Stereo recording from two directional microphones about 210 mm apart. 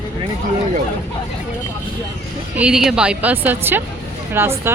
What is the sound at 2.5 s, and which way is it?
A woman's voice, 5° right (ahead or behind).